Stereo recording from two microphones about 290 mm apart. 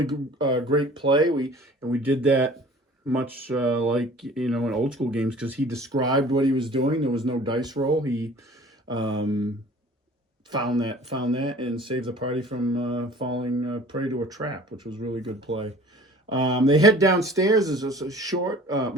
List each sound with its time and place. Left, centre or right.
0.0 s speech: centre
10.5 s speech: centre
16.3 s speech: centre